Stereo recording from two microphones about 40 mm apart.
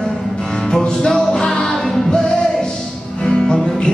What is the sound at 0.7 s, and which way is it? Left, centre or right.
Music, centre.